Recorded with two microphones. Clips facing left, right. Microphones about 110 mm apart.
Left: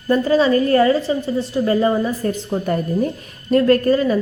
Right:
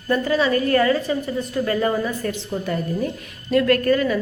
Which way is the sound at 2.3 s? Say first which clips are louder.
Left 5 dB; 45° left (ahead or behind).